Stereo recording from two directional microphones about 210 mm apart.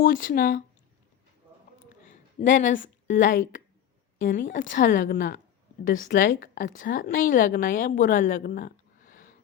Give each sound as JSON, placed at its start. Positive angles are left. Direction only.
{"t": 0.0, "sound": "speech", "side_deg": 40}
{"t": 2.0, "sound": "a woman's voice", "side_deg": 35}